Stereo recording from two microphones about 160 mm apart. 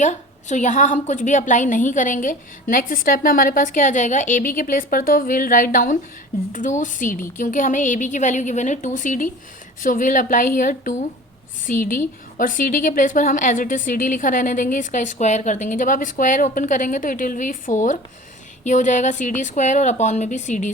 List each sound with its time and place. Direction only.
0.0 s a woman's voice: 50° left (ahead or behind)